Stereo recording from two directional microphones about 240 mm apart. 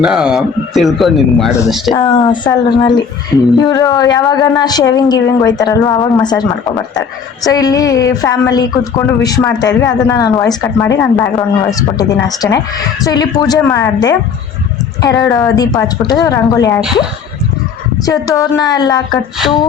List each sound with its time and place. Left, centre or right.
0.0 s a man's voice: centre
1.9 s a woman's voice: centre
18.0 s a woman's voice: centre